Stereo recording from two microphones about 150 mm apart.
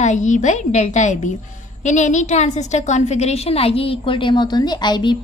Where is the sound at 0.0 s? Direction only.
50° left (ahead or behind).